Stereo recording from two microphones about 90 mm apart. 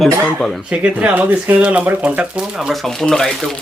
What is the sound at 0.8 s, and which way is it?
Speech, 15° right (ahead or behind).